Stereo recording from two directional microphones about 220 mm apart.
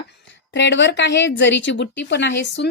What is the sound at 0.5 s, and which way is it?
A woman's voice, 55° left (ahead or behind).